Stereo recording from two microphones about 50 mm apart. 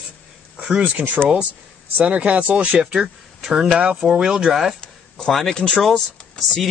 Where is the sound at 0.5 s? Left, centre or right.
Right.